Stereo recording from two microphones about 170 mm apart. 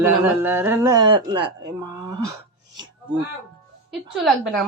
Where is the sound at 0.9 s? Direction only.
25° right (ahead or behind).